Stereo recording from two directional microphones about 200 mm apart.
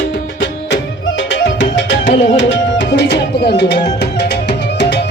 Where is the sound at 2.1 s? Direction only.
60° left (ahead or behind).